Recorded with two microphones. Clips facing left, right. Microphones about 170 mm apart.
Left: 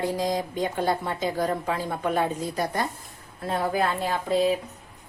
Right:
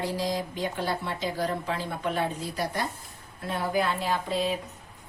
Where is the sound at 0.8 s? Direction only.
50° left (ahead or behind).